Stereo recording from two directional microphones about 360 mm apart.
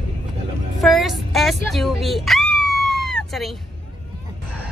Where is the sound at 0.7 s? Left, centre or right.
Centre.